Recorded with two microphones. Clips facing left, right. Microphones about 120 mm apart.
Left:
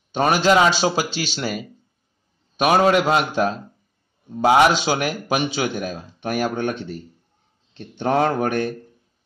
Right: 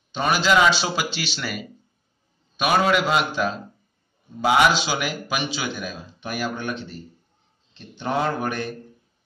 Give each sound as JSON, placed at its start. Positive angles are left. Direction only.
{"t": 0.1, "sound": "a man's voice", "side_deg": 50}